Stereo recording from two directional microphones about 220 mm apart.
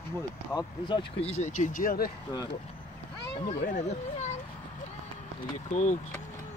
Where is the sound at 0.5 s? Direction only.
20° left (ahead or behind).